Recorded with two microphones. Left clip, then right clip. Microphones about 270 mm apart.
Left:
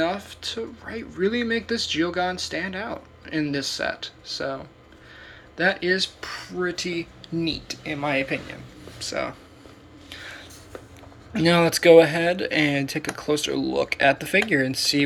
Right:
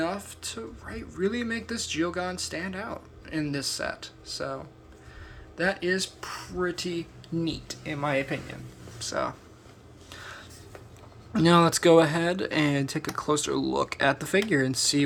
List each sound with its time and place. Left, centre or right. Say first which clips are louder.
0.0 s speech: left 6 dB; centre
10.1 s a sound: left 4 dB; right
11.3 s speech: left 2 dB; right